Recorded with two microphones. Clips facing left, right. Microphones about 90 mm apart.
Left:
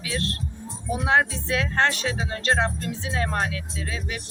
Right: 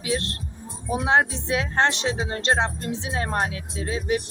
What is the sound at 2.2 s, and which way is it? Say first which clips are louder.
Speech: left 1 dB; 35° right (ahead or behind).